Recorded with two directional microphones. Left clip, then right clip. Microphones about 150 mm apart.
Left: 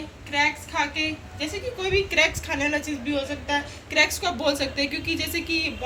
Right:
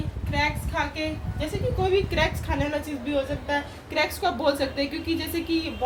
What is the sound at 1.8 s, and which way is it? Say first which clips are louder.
A woman's voice: left 2 dB; 50° right (ahead or behind).